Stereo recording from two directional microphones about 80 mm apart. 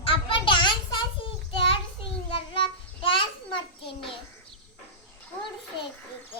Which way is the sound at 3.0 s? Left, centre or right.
Left.